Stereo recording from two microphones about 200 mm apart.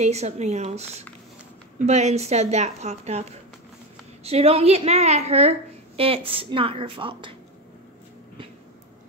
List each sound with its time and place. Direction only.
0.0 s a woman's voice: 35° right (ahead or behind)